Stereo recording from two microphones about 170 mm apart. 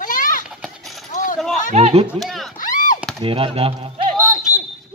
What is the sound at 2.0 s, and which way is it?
Speech, centre (ahead or behind).